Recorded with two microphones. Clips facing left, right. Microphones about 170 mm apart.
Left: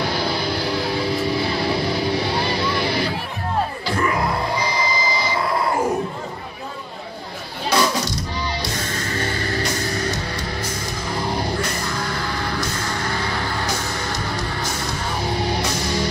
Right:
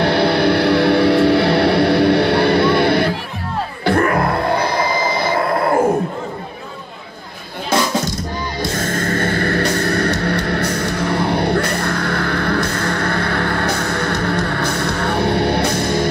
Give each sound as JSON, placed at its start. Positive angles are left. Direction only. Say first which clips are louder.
{"t": 0.0, "sound": "music", "louder": "right 9 dB", "side_deg": -65}
{"t": 3.8, "sound": "a sound", "louder": "right 11 dB", "side_deg": -60}
{"t": 8.5, "sound": "music", "louder": "right 6 dB", "side_deg": -50}